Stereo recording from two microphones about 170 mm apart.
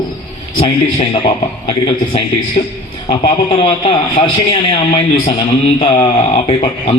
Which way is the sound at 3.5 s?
30° left (ahead or behind).